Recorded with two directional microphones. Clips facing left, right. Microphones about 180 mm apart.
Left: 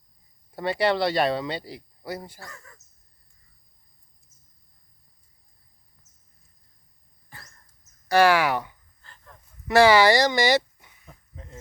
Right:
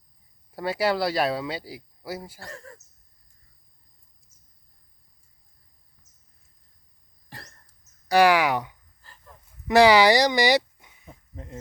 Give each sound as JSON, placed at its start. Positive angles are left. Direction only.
{"t": 0.5, "sound": "speech", "side_deg": -5}
{"t": 8.0, "sound": "speech", "side_deg": -15}
{"t": 9.0, "sound": "a sound", "side_deg": -5}